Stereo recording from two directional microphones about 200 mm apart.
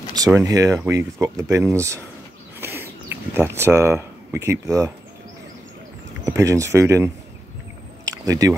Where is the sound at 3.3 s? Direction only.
15° right (ahead or behind).